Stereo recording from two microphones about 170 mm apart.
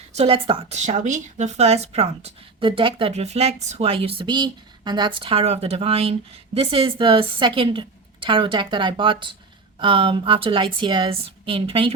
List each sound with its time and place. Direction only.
0.1 s speech: 35° right (ahead or behind)
0.8 s speech: 45° right (ahead or behind)